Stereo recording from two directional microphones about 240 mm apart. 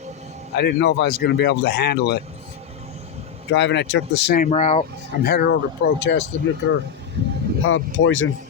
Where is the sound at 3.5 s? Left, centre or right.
Left.